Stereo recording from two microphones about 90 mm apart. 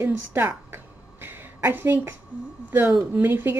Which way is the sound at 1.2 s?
20° right (ahead or behind).